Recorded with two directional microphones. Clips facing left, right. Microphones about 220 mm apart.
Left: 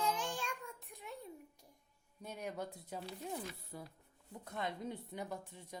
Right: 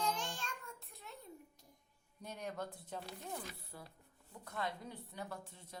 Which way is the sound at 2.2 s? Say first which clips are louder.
Left 1 dB; 5° left (ahead or behind).